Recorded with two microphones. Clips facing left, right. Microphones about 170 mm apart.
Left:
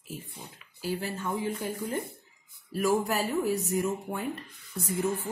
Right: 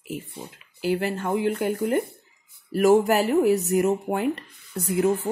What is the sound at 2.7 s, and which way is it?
Speech, 75° right (ahead or behind).